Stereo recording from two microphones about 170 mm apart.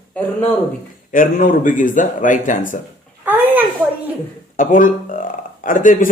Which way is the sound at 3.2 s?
10° right (ahead or behind).